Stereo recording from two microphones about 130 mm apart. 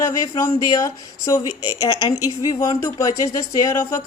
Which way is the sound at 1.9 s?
40° left (ahead or behind).